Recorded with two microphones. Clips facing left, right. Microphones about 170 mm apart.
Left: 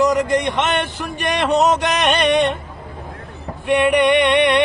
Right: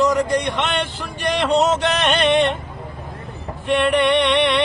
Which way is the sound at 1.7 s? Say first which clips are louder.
Left 1 dB; 15° left (ahead or behind).